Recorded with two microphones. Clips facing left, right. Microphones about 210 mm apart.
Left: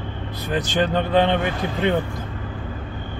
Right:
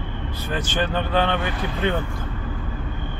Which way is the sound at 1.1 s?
20° left (ahead or behind).